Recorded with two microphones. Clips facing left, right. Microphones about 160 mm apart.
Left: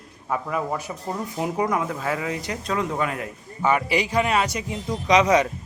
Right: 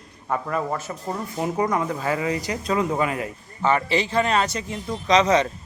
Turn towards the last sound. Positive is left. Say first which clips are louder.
# even
turn(degrees=10)  # may be behind; listen again after turning